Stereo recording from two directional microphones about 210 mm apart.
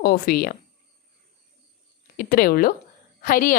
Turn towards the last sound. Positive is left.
turn(degrees=40)  # may be behind; listen again after turning